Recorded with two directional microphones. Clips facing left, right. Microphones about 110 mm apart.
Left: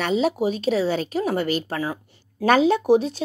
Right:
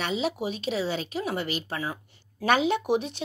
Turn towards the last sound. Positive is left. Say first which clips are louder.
# left 7 dB
turn(degrees=35)  # may be behind; listen again after turning